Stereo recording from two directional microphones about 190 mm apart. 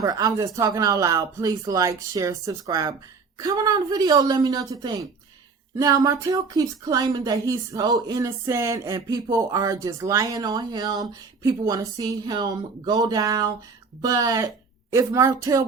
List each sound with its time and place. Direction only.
0.0 s speech: 20° right (ahead or behind)